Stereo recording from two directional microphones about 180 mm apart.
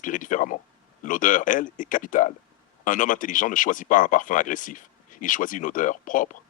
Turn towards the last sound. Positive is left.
turn(degrees=45)  # may be behind; listen again after turning